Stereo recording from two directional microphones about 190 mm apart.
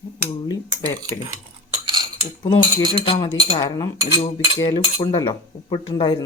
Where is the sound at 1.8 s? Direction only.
25° right (ahead or behind).